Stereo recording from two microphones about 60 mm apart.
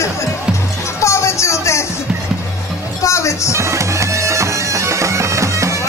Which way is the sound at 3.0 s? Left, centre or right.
Left.